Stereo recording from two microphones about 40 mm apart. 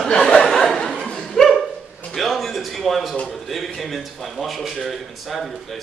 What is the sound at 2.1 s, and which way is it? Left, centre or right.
A man's voice, centre.